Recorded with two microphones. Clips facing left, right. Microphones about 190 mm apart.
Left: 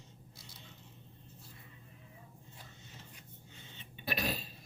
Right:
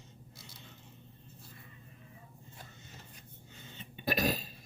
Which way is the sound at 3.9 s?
45° right (ahead or behind).